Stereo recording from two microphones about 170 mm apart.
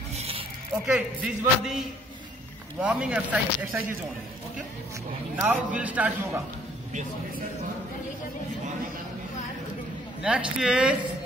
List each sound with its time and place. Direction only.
0.8 s a man's voice: 5° right (ahead or behind)
5.4 s speech: 5° right (ahead or behind)
10.2 s a man's voice: 5° right (ahead or behind)